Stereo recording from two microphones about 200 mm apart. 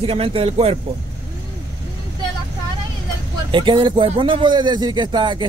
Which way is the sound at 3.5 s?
25° right (ahead or behind).